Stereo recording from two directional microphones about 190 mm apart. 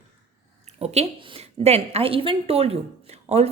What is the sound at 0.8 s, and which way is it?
A woman's voice, 35° right (ahead or behind).